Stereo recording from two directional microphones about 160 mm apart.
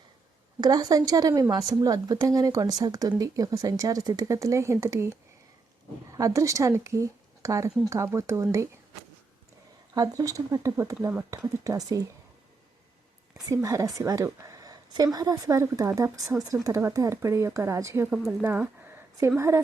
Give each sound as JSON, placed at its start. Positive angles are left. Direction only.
{"t": 0.6, "sound": "speech", "side_deg": -25}
{"t": 9.9, "sound": "speech", "side_deg": -25}
{"t": 13.3, "sound": "speech", "side_deg": -20}